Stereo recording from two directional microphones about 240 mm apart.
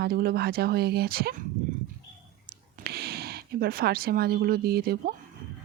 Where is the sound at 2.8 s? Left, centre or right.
Right.